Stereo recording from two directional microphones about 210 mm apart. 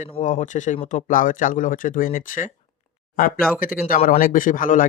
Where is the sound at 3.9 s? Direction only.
40° left (ahead or behind).